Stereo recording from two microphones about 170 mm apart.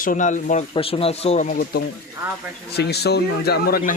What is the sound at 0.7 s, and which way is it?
Speech, 35° left (ahead or behind).